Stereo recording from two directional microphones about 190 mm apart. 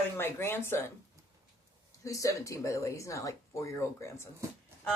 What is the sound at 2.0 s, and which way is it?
Speech, 15° left (ahead or behind).